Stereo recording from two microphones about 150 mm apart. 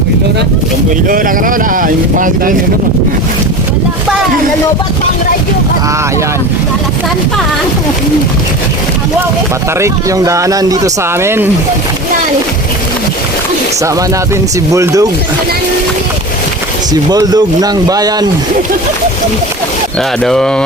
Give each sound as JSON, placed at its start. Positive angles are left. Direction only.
{"t": 1.0, "sound": "speech", "side_deg": -65}
{"t": 9.8, "sound": "speech", "side_deg": -20}
{"t": 14.7, "sound": "speech", "side_deg": -20}
{"t": 16.9, "sound": "speech", "side_deg": -25}
{"t": 20.0, "sound": "speech", "side_deg": 5}